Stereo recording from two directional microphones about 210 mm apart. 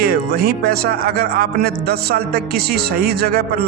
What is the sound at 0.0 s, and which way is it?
Speech, 50° right (ahead or behind).